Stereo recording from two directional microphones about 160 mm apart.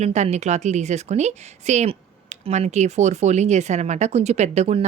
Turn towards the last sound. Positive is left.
turn(degrees=-45)  # may be behind; listen again after turning